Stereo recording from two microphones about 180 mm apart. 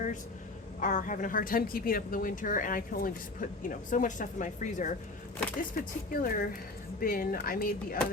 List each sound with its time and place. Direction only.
0.8 s a woman's voice: 45° left (ahead or behind)